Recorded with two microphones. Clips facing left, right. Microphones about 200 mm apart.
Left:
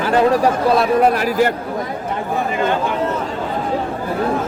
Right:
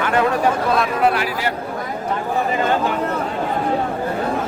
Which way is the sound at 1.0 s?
45° left (ahead or behind).